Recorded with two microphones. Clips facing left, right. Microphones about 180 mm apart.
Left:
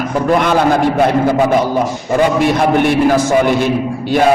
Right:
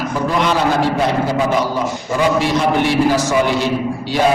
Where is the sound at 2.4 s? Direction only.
55° left (ahead or behind).